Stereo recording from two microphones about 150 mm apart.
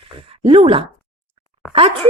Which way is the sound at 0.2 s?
40° right (ahead or behind).